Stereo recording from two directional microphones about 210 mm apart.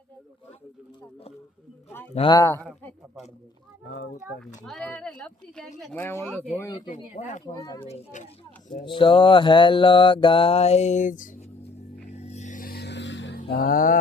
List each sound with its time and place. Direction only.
2.1 s speech: 20° left (ahead or behind)
3.9 s speech: 50° left (ahead or behind)
4.6 s speech: 5° left (ahead or behind)
6.2 s speech: centre (ahead or behind)
6.9 s music: 35° left (ahead or behind)
7.4 s speech: 15° left (ahead or behind)
7.9 s music: 35° left (ahead or behind)
8.8 s mantra: 25° left (ahead or behind); by 11.4 s 40° left (ahead or behind)
12.1 s a sound: 30° left (ahead or behind); by 13.4 s 60° left (ahead or behind)
13.4 s music: 45° left (ahead or behind)